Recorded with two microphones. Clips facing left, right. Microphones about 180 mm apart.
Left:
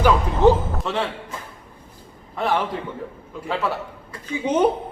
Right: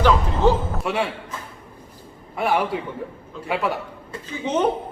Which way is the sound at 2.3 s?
10° right (ahead or behind).